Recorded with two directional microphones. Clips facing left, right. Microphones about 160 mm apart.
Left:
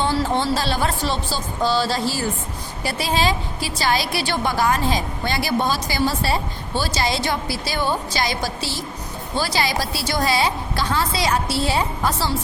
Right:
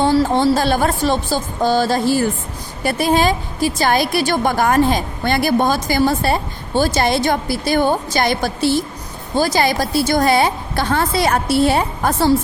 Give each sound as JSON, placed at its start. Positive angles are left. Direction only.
{"t": 0.0, "sound": "a woman's voice", "side_deg": -45}
{"t": 9.3, "sound": "a woman's voice", "side_deg": -45}